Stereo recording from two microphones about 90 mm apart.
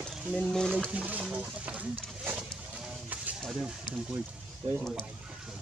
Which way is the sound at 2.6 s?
10° right (ahead or behind).